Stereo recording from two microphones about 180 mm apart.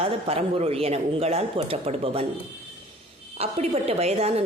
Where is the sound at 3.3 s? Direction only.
35° right (ahead or behind).